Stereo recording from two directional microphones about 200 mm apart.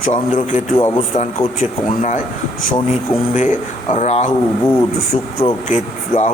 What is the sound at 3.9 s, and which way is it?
Speech, 35° left (ahead or behind).